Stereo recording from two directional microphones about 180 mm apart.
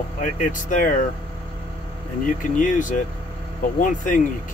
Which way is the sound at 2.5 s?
45° left (ahead or behind).